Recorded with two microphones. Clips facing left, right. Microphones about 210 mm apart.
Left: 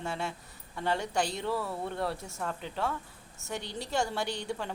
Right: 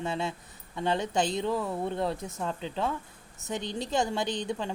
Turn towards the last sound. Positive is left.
turn(degrees=-20)  # may be behind; listen again after turning